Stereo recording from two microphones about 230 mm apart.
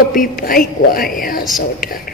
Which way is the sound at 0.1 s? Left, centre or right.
Left.